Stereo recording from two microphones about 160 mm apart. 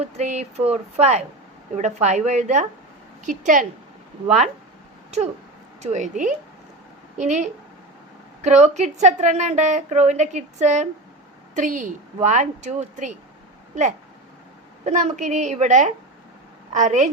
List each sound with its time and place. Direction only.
0.0 s a woman's voice: 45° right (ahead or behind)
5.1 s a woman's voice: 45° right (ahead or behind)